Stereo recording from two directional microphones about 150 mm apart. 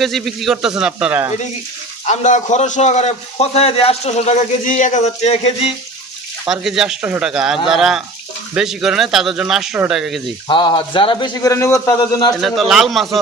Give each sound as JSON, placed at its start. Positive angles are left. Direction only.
{"t": 0.0, "sound": "speech", "side_deg": 0}
{"t": 2.0, "sound": "a man's voice", "side_deg": 55}
{"t": 6.5, "sound": "speech", "side_deg": -5}
{"t": 10.5, "sound": "a man's voice", "side_deg": 30}
{"t": 11.5, "sound": "speech", "side_deg": 20}
{"t": 12.4, "sound": "speech", "side_deg": 0}